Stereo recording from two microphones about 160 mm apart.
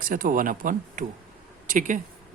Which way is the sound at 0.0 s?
60° right (ahead or behind).